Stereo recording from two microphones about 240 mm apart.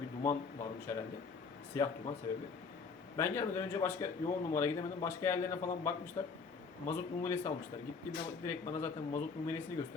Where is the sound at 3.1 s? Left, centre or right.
Centre.